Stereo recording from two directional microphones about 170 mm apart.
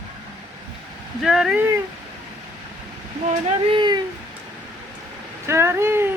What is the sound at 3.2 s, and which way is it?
Speech, 30° right (ahead or behind).